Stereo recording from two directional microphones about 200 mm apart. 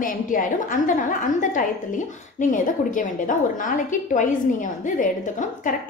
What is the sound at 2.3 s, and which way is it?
A woman's voice, 40° left (ahead or behind).